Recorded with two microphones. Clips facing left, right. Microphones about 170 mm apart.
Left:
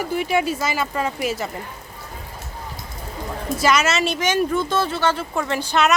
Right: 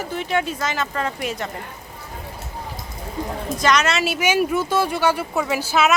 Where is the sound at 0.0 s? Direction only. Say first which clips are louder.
Left 2 dB; 10° left (ahead or behind).